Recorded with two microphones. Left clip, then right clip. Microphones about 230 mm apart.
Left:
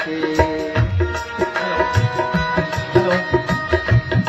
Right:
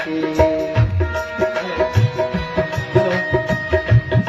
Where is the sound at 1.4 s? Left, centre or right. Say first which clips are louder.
Left 1 dB; left.